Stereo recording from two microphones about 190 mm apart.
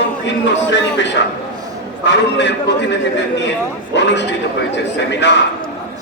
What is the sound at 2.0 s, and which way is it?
A man's voice, 65° left (ahead or behind).